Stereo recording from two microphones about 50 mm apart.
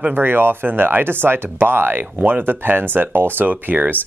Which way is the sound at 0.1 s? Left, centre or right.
Right.